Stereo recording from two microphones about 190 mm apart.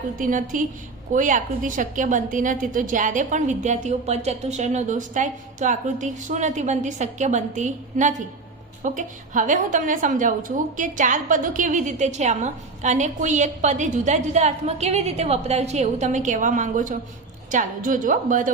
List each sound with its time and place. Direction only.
0.2 s a woman's voice: 45° right (ahead or behind)